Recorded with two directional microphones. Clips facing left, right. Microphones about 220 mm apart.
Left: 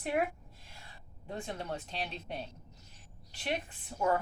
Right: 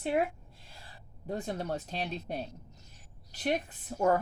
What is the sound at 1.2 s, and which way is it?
A woman's voice, 40° right (ahead or behind).